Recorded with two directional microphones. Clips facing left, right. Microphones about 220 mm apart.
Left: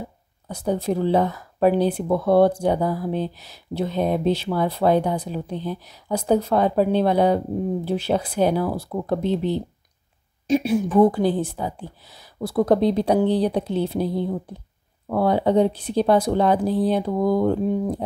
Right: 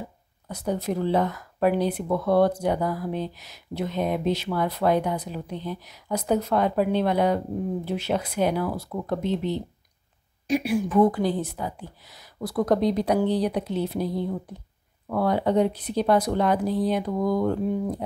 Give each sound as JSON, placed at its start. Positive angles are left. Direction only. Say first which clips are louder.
{"t": 0.5, "sound": "a woman's voice", "louder": "left 4 dB", "side_deg": 30}